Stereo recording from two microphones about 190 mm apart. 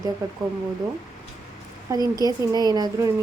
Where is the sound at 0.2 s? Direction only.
20° right (ahead or behind).